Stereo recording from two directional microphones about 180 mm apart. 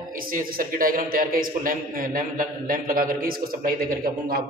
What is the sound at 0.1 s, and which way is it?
A man's voice, 50° right (ahead or behind).